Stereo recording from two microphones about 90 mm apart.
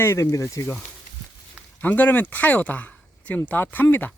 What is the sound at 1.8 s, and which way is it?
A man's voice, 20° left (ahead or behind).